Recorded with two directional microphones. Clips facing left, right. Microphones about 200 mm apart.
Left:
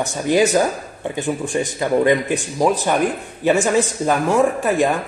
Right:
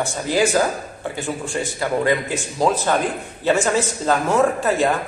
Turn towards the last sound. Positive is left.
turn(degrees=15)  # may be behind; listen again after turning